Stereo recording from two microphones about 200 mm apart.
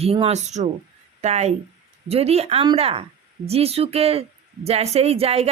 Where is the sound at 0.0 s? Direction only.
30° right (ahead or behind).